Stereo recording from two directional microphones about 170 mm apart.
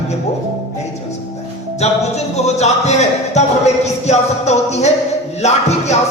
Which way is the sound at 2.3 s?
40° left (ahead or behind).